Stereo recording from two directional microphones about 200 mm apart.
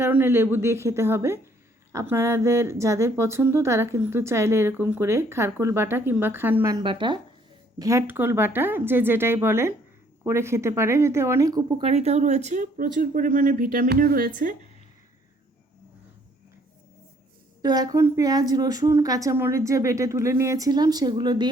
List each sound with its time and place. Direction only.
0.0 s speech: 10° right (ahead or behind)
11.9 s speech: 30° right (ahead or behind)
17.6 s speech: 20° right (ahead or behind)